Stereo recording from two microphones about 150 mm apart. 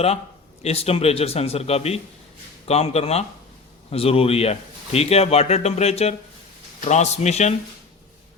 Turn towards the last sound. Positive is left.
turn(degrees=50)  # may be behind; listen again after turning